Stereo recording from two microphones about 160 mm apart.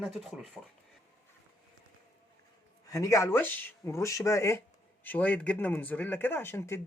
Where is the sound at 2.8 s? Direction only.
20° left (ahead or behind).